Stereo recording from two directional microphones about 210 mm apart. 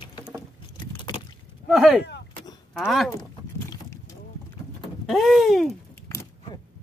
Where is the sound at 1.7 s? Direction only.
5° right (ahead or behind).